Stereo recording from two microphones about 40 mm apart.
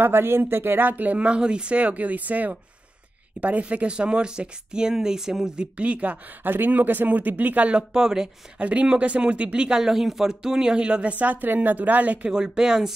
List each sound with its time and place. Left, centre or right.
0.0 s speech: right; by 5.5 s centre
5.6 s speech: right
6.4 s speech: right
7.9 s speech: centre
8.5 s speech: right
9.8 s speech: centre; by 12.3 s right
12.3 s speech: centre